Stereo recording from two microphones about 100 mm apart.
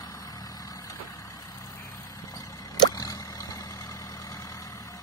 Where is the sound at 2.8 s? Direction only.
40° left (ahead or behind).